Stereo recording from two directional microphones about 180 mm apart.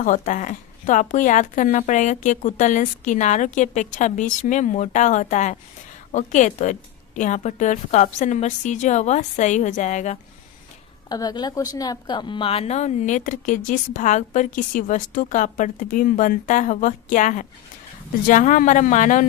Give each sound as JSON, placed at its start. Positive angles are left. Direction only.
{"t": 0.0, "sound": "a woman's voice", "side_deg": 45}
{"t": 11.1, "sound": "a woman's voice", "side_deg": 20}